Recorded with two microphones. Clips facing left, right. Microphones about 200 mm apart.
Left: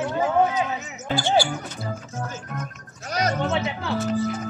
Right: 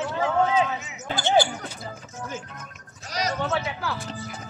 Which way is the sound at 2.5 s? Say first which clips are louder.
Left 9 dB; 50° left (ahead or behind).